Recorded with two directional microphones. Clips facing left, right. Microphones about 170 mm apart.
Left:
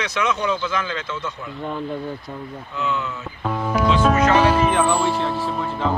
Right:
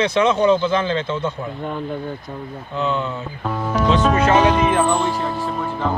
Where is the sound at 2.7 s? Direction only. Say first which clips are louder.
Right 4 dB; 30° right (ahead or behind).